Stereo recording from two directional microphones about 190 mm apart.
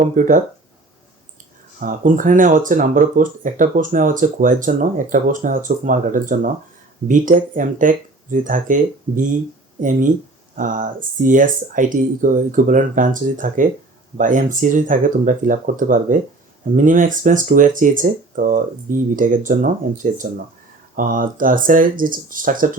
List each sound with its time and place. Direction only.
0.0 s speech: 45° right (ahead or behind)
1.8 s speech: 45° right (ahead or behind)